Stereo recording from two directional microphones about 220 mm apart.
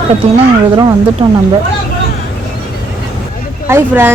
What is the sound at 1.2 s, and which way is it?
Speech, 25° right (ahead or behind).